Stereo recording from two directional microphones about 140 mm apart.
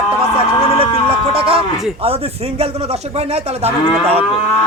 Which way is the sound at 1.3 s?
45° right (ahead or behind).